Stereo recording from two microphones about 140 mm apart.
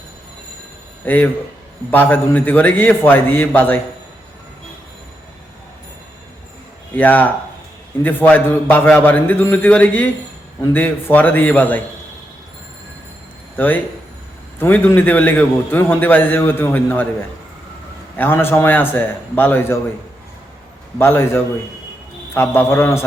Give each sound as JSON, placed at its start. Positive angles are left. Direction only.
{"t": 1.0, "sound": "a man's voice", "side_deg": 10}
{"t": 6.9, "sound": "a man's voice", "side_deg": 10}
{"t": 13.6, "sound": "a man's voice", "side_deg": 15}
{"t": 18.2, "sound": "a man's voice", "side_deg": 15}
{"t": 21.0, "sound": "a man's voice", "side_deg": 15}